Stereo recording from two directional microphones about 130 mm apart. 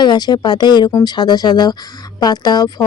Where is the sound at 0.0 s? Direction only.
35° left (ahead or behind).